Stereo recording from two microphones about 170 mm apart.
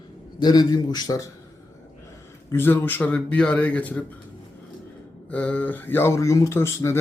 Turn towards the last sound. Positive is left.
turn(degrees=15)  # may be behind; listen again after turning